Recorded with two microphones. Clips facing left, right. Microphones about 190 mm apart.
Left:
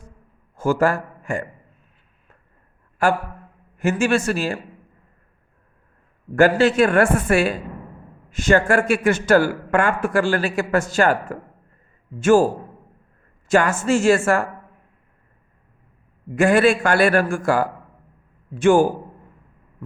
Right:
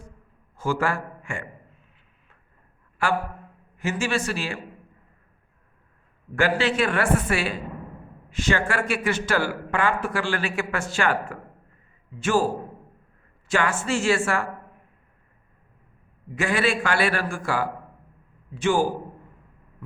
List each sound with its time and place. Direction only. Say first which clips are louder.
0.5 s a man's voice: left 6 dB; 45° left (ahead or behind)
3.8 s a man's voice: left 7 dB; 50° left (ahead or behind)
6.3 s speech: left 7 dB; 45° left (ahead or behind)
13.5 s speech: left 6 dB; 45° left (ahead or behind)
16.3 s speech: left 8 dB; 50° left (ahead or behind)